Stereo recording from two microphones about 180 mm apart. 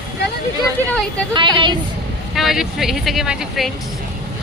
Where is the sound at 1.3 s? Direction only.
25° right (ahead or behind).